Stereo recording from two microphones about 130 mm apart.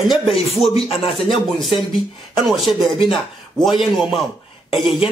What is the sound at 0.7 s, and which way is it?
Speech, 45° left (ahead or behind).